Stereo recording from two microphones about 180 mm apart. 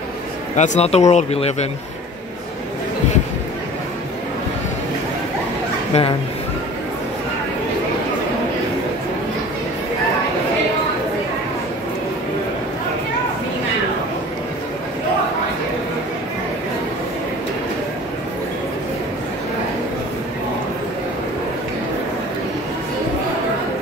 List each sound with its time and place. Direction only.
0.6 s speech: 35° left (ahead or behind)
5.9 s speech: 35° left (ahead or behind)